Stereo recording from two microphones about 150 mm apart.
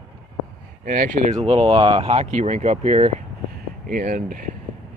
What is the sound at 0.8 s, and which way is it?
Speech, 60° right (ahead or behind).